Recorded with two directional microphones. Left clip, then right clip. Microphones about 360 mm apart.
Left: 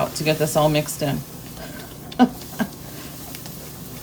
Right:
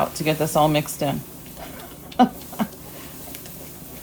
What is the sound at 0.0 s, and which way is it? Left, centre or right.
Speech, centre.